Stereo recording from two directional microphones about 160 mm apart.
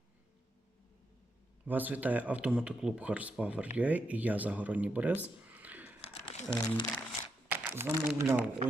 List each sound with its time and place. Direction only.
1.6 s speech: 10° right (ahead or behind)
6.1 s crumpling: 35° left (ahead or behind)
7.4 s speech: 10° right (ahead or behind)